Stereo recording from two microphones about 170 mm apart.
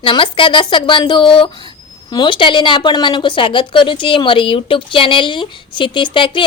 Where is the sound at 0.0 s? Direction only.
30° left (ahead or behind).